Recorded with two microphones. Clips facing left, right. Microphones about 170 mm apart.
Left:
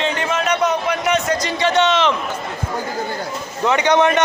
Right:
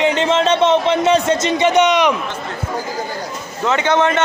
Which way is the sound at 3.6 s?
15° left (ahead or behind).